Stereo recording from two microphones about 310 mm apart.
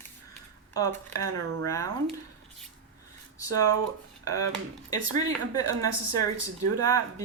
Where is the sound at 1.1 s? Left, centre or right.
Right.